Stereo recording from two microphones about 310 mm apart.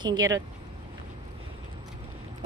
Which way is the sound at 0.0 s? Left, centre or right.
Centre.